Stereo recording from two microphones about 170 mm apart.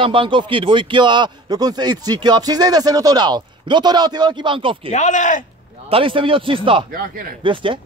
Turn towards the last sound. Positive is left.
turn(degrees=-30)  # may be behind; listen again after turning